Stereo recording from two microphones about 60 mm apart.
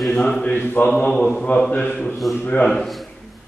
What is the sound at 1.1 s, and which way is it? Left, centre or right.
Mantra, centre.